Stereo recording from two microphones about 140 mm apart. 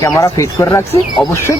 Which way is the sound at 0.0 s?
20° left (ahead or behind).